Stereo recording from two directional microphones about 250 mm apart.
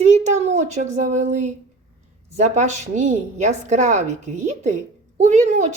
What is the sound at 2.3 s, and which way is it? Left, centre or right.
A woman's voice, right.